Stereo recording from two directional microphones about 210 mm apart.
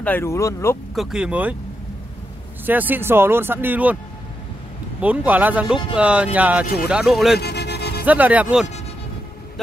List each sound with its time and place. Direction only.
0.0 s speech: 10° left (ahead or behind)
0.9 s speech: 5° right (ahead or behind)
2.6 s speech: 10° right (ahead or behind)
5.0 s speech: 5° right (ahead or behind)
6.6 s speech: 50° left (ahead or behind)
6.9 s speech: 5° right (ahead or behind)
7.3 s music: 50° left (ahead or behind)
8.0 s speech: 5° right (ahead or behind)